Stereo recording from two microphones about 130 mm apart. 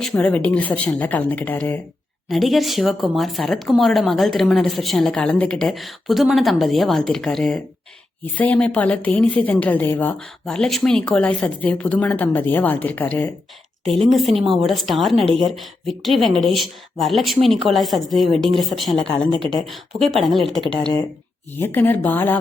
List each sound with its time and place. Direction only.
0.0 s a woman's voice: 5° left (ahead or behind)
2.3 s a woman's voice: centre (ahead or behind)
13.9 s speech: centre (ahead or behind)
21.5 s a woman's voice: 15° left (ahead or behind)